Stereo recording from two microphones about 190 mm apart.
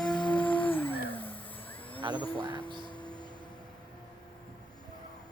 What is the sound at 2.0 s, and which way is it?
Speech, 25° right (ahead or behind).